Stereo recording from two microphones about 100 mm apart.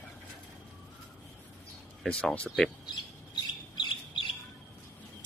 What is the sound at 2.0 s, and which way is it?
Speech, 5° left (ahead or behind).